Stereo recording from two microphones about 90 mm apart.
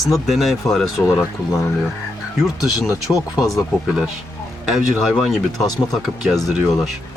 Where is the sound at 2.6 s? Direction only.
45° left (ahead or behind).